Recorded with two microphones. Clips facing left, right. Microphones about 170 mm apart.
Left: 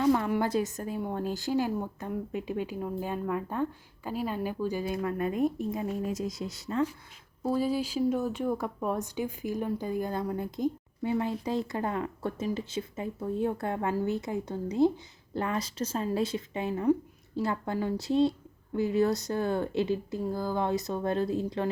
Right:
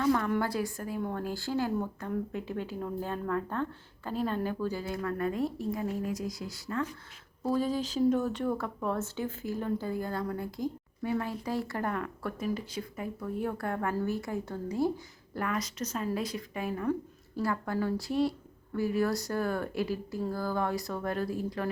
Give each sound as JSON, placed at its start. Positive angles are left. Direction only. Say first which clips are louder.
{"t": 0.0, "sound": "a woman's voice", "louder": "left 2 dB", "side_deg": 15}
{"t": 7.4, "sound": "speech", "louder": "left 1 dB", "side_deg": 10}